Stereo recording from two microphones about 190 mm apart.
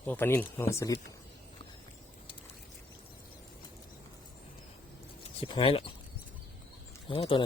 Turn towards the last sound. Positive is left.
turn(degrees=25)  # may be behind; listen again after turning